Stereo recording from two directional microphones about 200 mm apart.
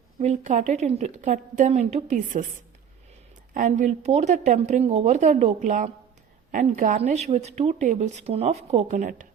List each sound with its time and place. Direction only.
0.2 s a woman's voice: 35° right (ahead or behind)
3.5 s a woman's voice: 40° right (ahead or behind)